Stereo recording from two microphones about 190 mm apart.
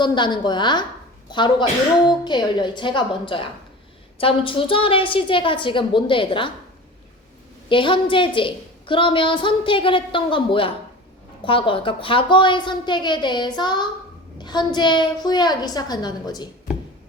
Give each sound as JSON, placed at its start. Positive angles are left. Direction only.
{"t": 0.0, "sound": "a woman's voice", "side_deg": 25}
{"t": 7.7, "sound": "a woman's voice", "side_deg": 25}